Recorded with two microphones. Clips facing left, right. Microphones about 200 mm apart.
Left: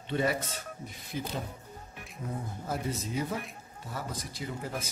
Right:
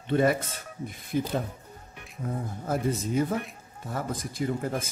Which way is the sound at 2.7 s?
50° right (ahead or behind).